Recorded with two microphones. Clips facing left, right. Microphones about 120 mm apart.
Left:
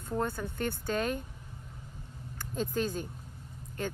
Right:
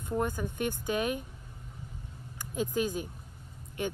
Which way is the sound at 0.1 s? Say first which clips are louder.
Right 1 dB; 10° right (ahead or behind).